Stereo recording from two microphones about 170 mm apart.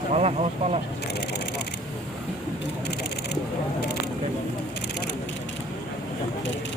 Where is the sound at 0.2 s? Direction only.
35° right (ahead or behind).